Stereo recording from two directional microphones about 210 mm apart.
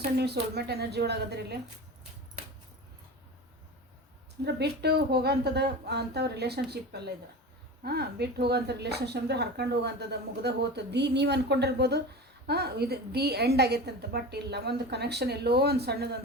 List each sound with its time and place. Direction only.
0.2 s speech: 50° right (ahead or behind)
4.4 s speech: 50° right (ahead or behind)